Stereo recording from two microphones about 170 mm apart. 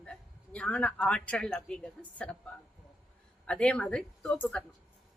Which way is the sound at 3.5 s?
5° left (ahead or behind).